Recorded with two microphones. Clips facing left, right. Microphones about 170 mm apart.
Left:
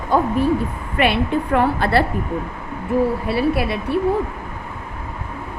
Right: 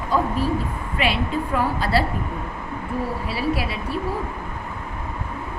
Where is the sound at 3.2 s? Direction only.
60° left (ahead or behind).